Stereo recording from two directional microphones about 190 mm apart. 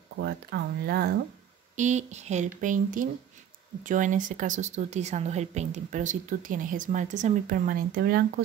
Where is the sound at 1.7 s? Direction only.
40° right (ahead or behind).